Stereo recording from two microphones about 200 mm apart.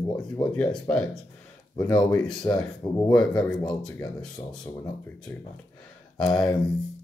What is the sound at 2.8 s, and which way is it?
Speech, 20° left (ahead or behind).